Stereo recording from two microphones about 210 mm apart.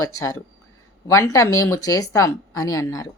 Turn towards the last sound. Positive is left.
turn(degrees=15)  # may be behind; listen again after turning